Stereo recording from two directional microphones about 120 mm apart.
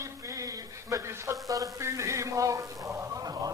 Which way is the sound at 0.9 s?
25° right (ahead or behind).